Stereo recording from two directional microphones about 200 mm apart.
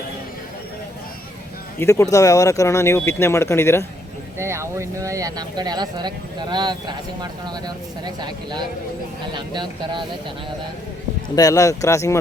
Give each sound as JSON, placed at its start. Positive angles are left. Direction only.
{"t": 1.8, "sound": "speech", "side_deg": 15}
{"t": 4.4, "sound": "speech", "side_deg": -15}
{"t": 11.3, "sound": "speech", "side_deg": 15}